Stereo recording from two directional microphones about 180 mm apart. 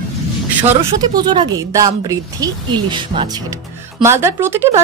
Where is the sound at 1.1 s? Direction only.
25° right (ahead or behind).